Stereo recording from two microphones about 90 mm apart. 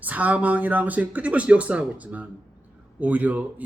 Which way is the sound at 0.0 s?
15° right (ahead or behind).